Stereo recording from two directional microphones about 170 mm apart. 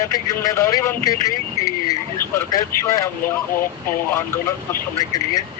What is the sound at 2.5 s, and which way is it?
Speech, 20° left (ahead or behind).